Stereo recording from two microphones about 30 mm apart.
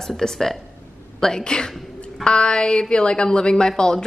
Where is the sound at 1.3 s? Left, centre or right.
Left.